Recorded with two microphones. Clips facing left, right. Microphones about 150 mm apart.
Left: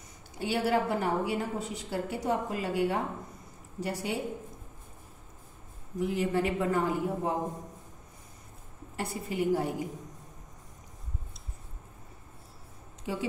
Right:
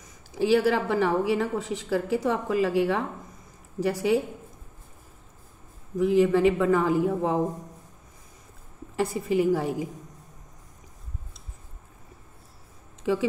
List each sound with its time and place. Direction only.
0.4 s a woman's voice: 90° right
5.9 s a woman's voice: 90° right
8.9 s a woman's voice: 90° right